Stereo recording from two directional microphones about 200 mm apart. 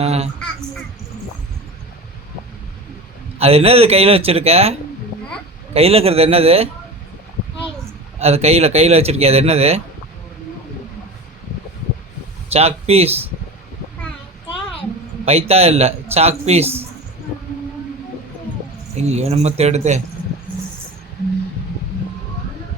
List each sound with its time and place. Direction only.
0.0 s speech: 30° right (ahead or behind)
3.3 s speech: 30° right (ahead or behind)
5.7 s speech: 30° right (ahead or behind)
8.2 s speech: 30° right (ahead or behind)
12.5 s speech: 30° right (ahead or behind)
15.2 s speech: 30° right (ahead or behind)
18.9 s speech: 35° right (ahead or behind)